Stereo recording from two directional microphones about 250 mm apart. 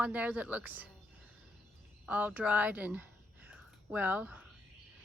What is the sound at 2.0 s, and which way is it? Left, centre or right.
Speech, centre.